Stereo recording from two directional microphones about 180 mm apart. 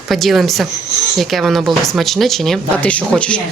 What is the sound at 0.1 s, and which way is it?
Speech, centre (ahead or behind).